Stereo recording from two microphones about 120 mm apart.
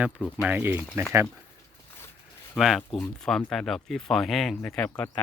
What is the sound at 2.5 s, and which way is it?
Speech, centre (ahead or behind).